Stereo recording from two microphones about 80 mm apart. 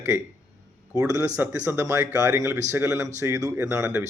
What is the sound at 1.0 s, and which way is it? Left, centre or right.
Speech, right.